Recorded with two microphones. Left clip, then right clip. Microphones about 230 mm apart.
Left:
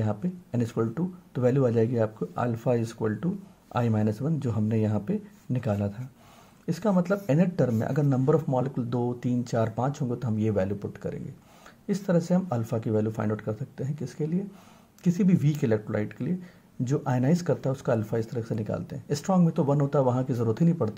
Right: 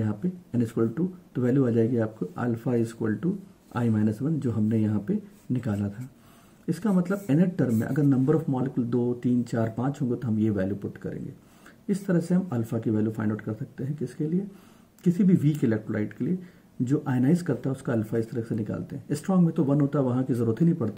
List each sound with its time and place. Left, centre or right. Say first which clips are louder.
0.0 s speech: even; left